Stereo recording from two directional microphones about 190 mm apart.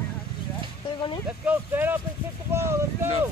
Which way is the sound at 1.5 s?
10° right (ahead or behind).